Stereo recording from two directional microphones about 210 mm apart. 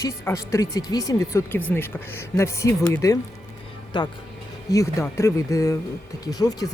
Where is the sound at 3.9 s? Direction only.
20° left (ahead or behind).